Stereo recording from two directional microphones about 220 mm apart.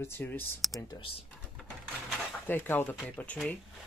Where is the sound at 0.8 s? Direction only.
15° left (ahead or behind).